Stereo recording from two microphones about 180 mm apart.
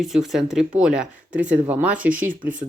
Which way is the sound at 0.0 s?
Centre (ahead or behind).